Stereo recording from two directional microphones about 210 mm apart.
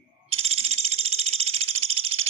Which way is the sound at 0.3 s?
30° right (ahead or behind).